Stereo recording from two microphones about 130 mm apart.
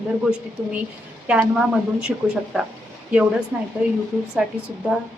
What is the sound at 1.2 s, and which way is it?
Speech, 10° right (ahead or behind).